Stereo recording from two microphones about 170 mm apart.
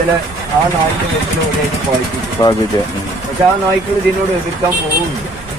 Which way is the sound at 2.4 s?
20° left (ahead or behind).